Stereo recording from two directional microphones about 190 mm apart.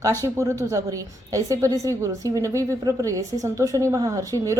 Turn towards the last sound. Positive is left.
turn(degrees=-15)  # may be behind; listen again after turning